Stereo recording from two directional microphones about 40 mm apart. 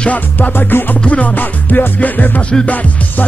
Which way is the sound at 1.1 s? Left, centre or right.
Left.